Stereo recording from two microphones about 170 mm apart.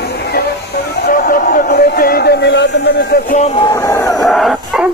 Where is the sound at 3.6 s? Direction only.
20° left (ahead or behind).